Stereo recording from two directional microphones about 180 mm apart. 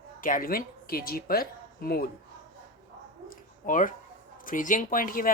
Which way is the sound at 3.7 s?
50° left (ahead or behind).